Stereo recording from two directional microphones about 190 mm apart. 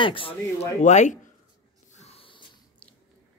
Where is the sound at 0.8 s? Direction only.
40° left (ahead or behind).